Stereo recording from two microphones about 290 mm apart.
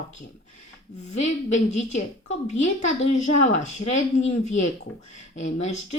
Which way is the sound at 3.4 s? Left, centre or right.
Left.